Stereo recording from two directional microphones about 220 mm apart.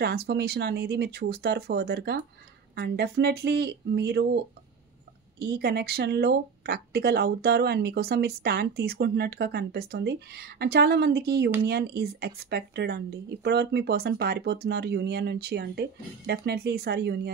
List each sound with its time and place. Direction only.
0.0 s speech: 45° right (ahead or behind)
5.4 s speech: 45° right (ahead or behind)